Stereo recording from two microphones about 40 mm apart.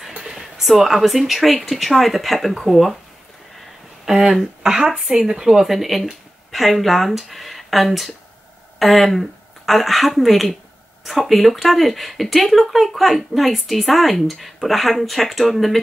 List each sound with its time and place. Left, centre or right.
0.3 s a sound: centre
0.7 s speech: centre
4.0 s a woman's voice: centre